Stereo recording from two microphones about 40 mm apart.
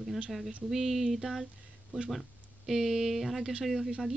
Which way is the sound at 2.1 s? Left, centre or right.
Centre.